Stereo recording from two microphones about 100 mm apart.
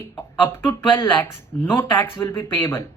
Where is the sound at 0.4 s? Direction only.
25° left (ahead or behind).